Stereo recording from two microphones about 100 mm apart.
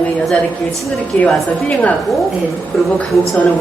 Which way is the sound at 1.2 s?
15° left (ahead or behind).